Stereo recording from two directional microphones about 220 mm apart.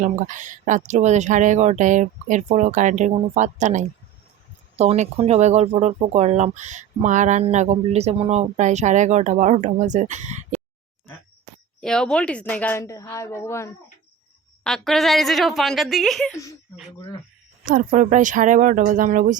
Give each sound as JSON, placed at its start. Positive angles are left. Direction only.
{"t": 0.0, "sound": "speech", "side_deg": -35}
{"t": 11.8, "sound": "a woman's voice", "side_deg": 5}
{"t": 17.7, "sound": "speech", "side_deg": -35}